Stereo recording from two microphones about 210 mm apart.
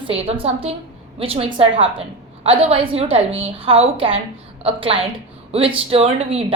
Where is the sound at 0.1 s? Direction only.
25° right (ahead or behind).